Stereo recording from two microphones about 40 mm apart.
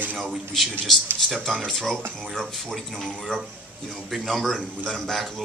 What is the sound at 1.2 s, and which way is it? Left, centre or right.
Speech, centre.